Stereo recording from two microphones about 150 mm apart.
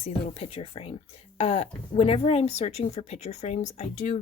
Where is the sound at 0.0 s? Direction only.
45° left (ahead or behind).